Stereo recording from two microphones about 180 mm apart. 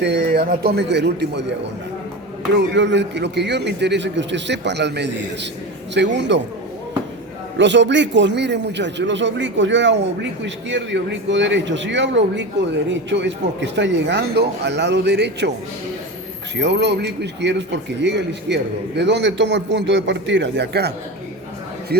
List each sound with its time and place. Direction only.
0.0 s a man's voice: 65° right (ahead or behind)
2.6 s a man's voice: 80° right
7.6 s a man's voice: 85° right
16.6 s a man's voice: 70° right (ahead or behind)